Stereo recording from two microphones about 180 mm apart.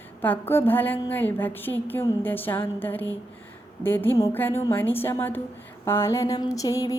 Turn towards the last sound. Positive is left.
turn(degrees=20)  # may be behind; listen again after turning